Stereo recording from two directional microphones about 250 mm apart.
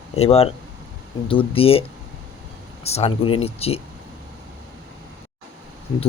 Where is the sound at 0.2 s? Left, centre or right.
Left.